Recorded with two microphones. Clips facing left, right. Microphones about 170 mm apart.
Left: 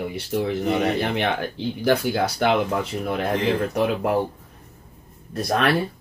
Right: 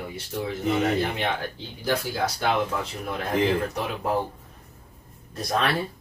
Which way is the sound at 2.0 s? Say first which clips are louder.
Left 5 dB; 60° left (ahead or behind).